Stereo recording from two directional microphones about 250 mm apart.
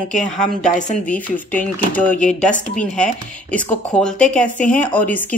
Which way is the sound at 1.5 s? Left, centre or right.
Centre.